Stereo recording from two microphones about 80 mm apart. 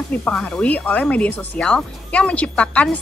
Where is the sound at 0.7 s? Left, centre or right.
Centre.